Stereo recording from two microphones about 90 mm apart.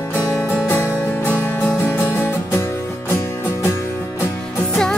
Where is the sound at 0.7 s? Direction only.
20° left (ahead or behind).